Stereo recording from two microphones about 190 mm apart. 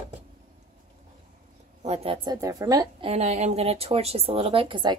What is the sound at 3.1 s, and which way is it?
Speech, 35° right (ahead or behind).